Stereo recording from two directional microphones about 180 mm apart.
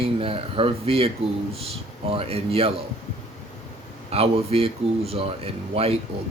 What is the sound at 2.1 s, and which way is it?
Speech, 30° right (ahead or behind).